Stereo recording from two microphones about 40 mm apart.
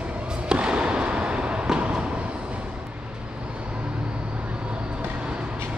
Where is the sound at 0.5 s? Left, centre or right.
Right.